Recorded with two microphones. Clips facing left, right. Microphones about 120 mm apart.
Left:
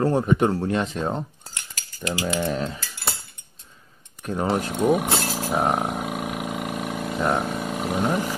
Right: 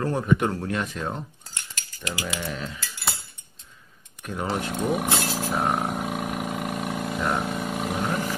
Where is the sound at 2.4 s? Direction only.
35° left (ahead or behind).